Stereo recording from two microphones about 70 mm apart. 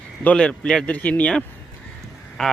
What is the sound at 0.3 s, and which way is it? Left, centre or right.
Speech, centre.